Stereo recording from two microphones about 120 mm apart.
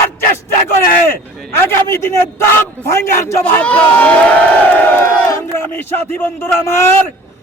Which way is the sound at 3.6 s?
10° left (ahead or behind).